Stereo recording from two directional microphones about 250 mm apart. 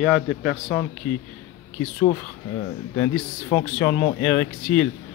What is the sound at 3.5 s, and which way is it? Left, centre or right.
A man's voice, centre.